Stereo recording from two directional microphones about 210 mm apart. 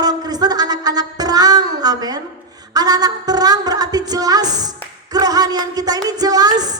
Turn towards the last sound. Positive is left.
turn(degrees=-20)  # may be behind; listen again after turning